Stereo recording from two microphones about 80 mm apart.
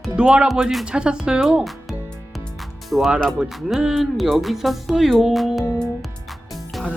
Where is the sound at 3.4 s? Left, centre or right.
Centre.